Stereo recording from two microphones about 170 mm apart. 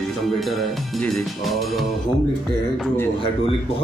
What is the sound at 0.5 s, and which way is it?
Speech, centre (ahead or behind).